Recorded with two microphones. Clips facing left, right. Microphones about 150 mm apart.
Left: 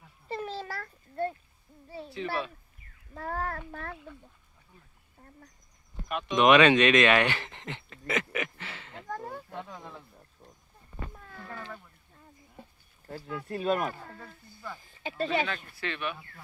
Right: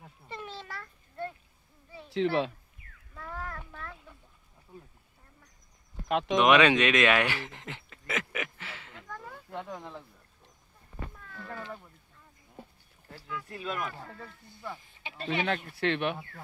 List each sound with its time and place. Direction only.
0.3 s a sound: 35° left (ahead or behind)
3.2 s a child's voice: 55° left (ahead or behind)
6.0 s speech: 90° right
6.3 s speech: 5° right (ahead or behind)
8.9 s a sound: 40° left (ahead or behind)
11.1 s cat: 35° left (ahead or behind)
13.5 s speech: 30° left (ahead or behind)
15.4 s speech: 60° right (ahead or behind)